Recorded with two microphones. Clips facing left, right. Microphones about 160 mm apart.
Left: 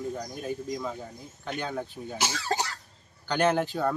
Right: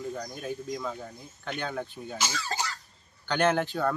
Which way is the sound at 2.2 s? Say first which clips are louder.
Left 3 dB; 70° left (ahead or behind).